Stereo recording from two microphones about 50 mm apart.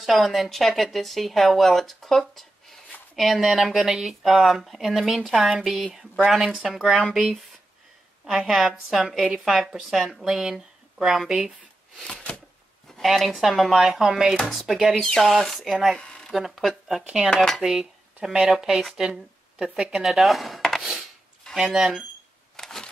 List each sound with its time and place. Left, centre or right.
0.0 s speech: centre
8.3 s speech: centre
12.8 s speech: centre
16.0 s a sound: centre
16.3 s speech: centre
17.3 s dishes: centre
17.6 s dishes: centre
18.5 s speech: centre
21.5 s speech: centre
22.6 s a sound: centre